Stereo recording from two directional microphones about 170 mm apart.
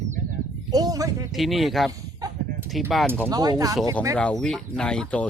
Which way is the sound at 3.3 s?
20° right (ahead or behind).